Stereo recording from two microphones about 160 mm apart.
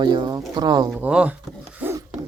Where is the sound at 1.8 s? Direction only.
10° right (ahead or behind).